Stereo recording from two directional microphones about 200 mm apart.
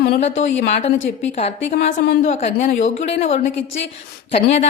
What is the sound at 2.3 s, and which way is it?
Speech, 35° left (ahead or behind).